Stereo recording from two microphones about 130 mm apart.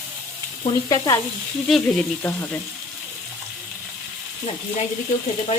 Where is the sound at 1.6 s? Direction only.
Centre (ahead or behind).